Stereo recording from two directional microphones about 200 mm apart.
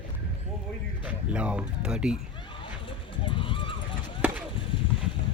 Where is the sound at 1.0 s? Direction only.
5° right (ahead or behind).